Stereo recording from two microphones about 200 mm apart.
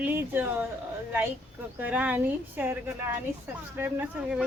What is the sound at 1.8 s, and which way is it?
A woman's voice, 5° right (ahead or behind).